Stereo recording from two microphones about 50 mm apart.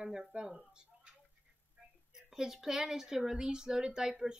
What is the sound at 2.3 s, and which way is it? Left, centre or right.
Speech, centre.